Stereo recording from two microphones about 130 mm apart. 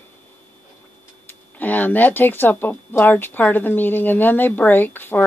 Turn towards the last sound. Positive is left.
turn(degrees=15)  # may be behind; listen again after turning